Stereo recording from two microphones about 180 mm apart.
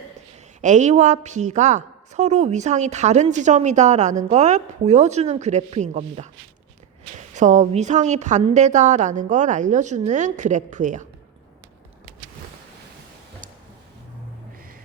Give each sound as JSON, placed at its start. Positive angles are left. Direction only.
{"t": 0.6, "sound": "a woman's voice", "side_deg": -40}